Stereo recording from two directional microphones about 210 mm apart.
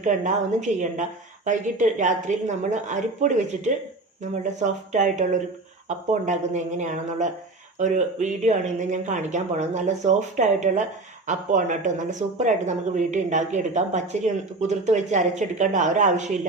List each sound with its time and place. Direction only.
0.0 s speech: 35° right (ahead or behind)